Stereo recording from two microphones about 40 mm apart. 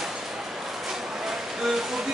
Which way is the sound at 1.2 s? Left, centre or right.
Centre.